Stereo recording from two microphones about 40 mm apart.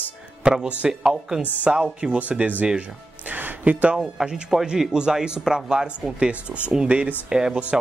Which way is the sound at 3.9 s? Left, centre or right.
Centre.